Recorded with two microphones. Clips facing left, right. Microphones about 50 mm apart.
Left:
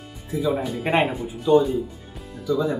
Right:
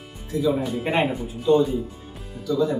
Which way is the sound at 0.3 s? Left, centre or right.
Centre.